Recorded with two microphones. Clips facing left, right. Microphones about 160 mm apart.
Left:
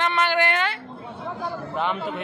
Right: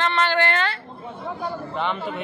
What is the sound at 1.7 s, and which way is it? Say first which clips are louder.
Speech: left 1 dB; 5° left (ahead or behind).